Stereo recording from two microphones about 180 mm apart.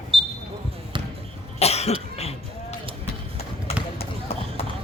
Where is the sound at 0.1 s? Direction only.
30° right (ahead or behind).